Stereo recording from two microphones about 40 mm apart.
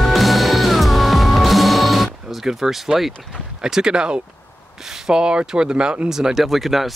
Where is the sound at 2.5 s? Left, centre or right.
Centre.